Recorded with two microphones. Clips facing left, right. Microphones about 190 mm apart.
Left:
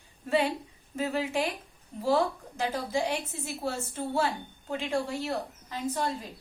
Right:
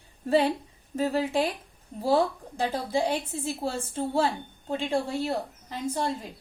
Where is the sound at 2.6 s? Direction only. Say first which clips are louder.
Right 3 dB; 35° right (ahead or behind).